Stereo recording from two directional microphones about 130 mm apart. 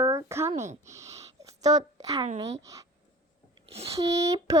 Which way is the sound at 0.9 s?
25° right (ahead or behind).